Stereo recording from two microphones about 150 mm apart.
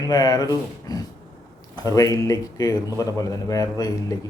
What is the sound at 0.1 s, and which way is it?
Speech, 25° left (ahead or behind).